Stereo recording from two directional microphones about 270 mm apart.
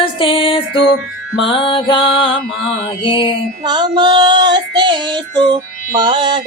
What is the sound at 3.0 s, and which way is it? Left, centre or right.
Music, centre.